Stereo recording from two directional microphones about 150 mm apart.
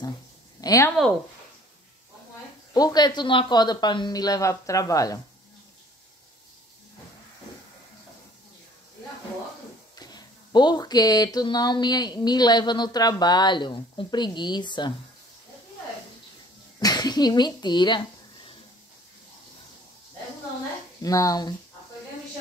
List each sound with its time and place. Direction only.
0.6 s speech: 20° left (ahead or behind)
2.7 s speech: 25° left (ahead or behind)
9.9 s speech: 25° left (ahead or behind)
16.8 s speech: 25° left (ahead or behind)
21.0 s speech: 20° left (ahead or behind)